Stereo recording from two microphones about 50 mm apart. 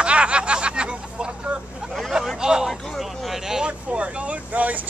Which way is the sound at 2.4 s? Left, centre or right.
Centre.